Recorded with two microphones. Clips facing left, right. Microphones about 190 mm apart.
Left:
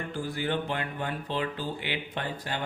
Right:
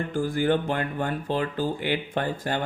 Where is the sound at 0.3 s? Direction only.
45° right (ahead or behind).